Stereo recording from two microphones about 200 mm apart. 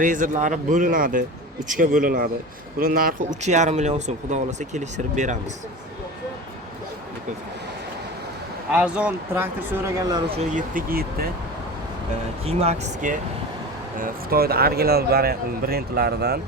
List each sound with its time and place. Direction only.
0.0 s speech: 40° right (ahead or behind)
8.7 s speech: 5° right (ahead or behind)
10.5 s speech: 45° right (ahead or behind)
12.5 s speech: 30° right (ahead or behind)
14.0 s speech: 50° right (ahead or behind)